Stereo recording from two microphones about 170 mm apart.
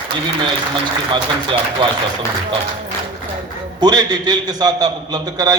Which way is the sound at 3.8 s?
25° right (ahead or behind).